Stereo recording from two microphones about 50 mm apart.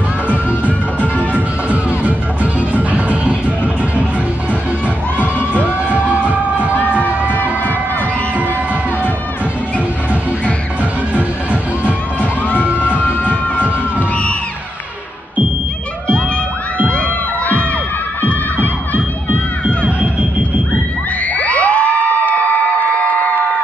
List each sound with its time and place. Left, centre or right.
0.3 s music: left
1.7 s music: right
5.2 s music: left
6.1 s music: right
7.3 s crowd: left
12.2 s music: left
21.4 s music: left
22.2 s a sound: left